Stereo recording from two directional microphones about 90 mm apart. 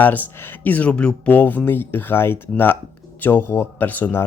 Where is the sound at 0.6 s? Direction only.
15° left (ahead or behind).